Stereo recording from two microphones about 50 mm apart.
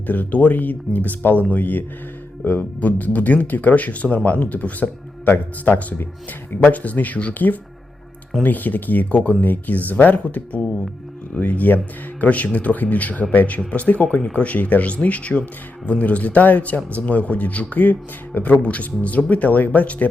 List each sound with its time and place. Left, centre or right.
0.1 s speech: left